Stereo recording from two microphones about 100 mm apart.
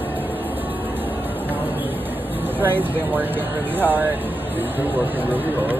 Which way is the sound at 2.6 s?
20° right (ahead or behind).